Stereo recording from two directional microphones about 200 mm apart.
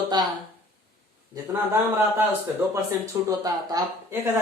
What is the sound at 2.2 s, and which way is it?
Speech, 15° right (ahead or behind).